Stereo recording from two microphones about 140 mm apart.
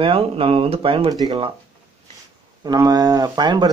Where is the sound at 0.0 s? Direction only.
40° right (ahead or behind).